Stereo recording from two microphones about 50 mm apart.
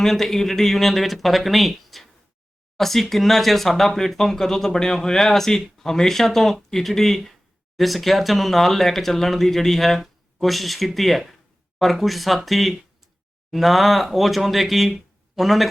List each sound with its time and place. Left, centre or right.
0.0 s speech: centre